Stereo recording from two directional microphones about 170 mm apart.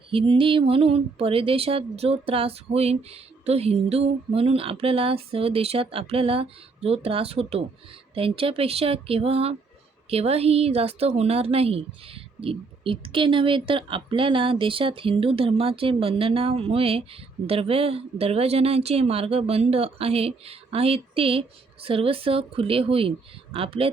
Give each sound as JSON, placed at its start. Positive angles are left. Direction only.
{"t": 0.1, "sound": "speech", "side_deg": -30}